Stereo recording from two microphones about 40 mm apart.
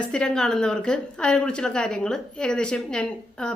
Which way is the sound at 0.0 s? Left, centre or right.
Centre.